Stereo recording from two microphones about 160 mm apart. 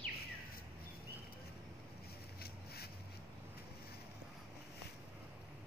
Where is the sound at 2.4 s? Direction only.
80° left.